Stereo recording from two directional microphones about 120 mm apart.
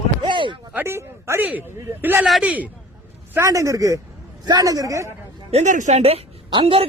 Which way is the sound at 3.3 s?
25° right (ahead or behind).